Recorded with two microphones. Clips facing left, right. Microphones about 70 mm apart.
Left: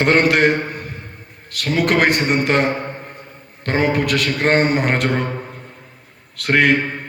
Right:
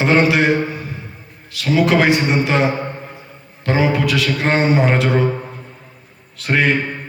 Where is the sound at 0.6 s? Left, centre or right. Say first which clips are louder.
Right 2 dB; left.